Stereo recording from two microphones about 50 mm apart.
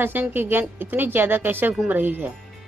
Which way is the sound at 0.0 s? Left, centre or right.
Right.